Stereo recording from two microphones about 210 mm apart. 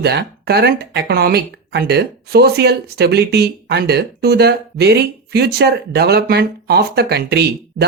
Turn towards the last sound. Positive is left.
turn(degrees=-50)  # may be behind; listen again after turning